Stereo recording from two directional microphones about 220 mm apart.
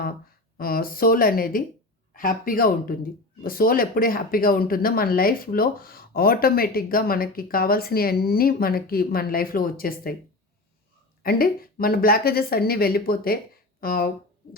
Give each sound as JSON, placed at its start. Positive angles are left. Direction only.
{"t": 0.5, "sound": "speech", "side_deg": 45}
{"t": 11.2, "sound": "speech", "side_deg": 40}